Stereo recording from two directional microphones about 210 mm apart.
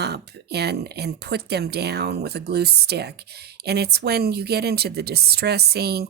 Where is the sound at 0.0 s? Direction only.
50° right (ahead or behind).